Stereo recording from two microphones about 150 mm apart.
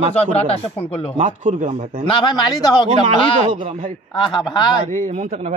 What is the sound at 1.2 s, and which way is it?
Speech, 55° right (ahead or behind).